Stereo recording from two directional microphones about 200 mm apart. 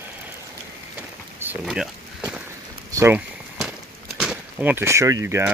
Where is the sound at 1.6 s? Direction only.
5° right (ahead or behind).